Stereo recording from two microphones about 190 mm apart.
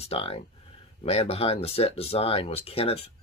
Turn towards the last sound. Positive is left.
turn(degrees=30)  # may be behind; listen again after turning